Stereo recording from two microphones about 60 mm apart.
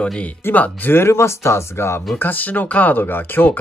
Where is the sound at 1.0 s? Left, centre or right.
Left.